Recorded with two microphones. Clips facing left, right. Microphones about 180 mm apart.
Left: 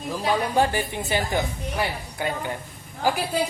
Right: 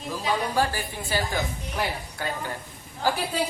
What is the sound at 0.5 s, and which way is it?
Speech, 20° left (ahead or behind).